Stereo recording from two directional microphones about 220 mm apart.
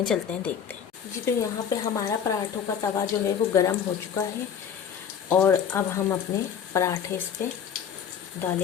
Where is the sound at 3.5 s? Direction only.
15° left (ahead or behind).